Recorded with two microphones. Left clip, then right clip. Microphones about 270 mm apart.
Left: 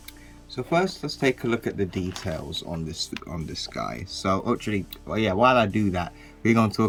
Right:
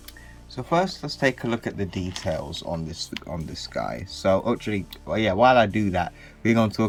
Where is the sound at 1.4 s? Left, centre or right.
Centre.